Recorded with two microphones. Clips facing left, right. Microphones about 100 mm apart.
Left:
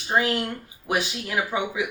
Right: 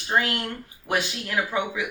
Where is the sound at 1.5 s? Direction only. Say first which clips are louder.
Even; 15° left (ahead or behind).